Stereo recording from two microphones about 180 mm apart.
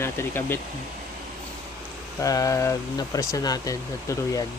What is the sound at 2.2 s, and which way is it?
Speech, 20° left (ahead or behind).